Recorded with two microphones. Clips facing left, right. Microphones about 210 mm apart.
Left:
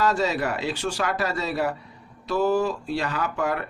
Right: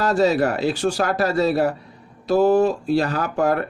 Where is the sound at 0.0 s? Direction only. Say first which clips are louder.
Right 6 dB; 40° right (ahead or behind).